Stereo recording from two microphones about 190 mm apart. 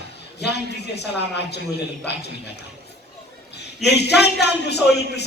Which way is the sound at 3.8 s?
60° left (ahead or behind).